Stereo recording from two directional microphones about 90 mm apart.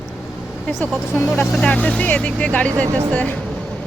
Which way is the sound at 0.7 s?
20° left (ahead or behind).